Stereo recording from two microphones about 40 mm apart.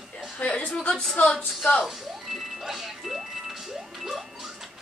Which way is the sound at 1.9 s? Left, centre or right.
Centre.